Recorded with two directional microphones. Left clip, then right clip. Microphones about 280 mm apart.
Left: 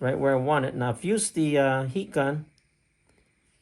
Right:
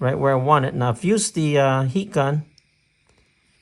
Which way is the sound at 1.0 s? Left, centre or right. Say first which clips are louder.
Right 6 dB; right.